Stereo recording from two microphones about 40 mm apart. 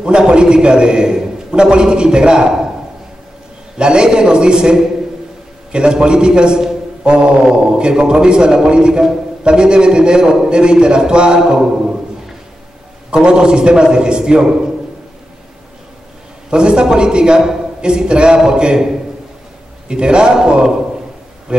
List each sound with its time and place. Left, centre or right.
0.0 s a man's voice: right
3.7 s a man's voice: right
13.1 s a man's voice: right
16.4 s a man's voice: right
19.9 s a man's voice: right
21.5 s music: right